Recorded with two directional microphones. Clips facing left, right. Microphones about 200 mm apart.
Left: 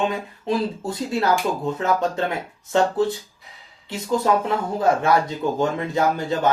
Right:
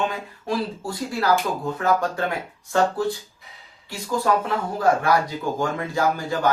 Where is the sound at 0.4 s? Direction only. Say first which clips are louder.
Left 3 dB; 20° left (ahead or behind).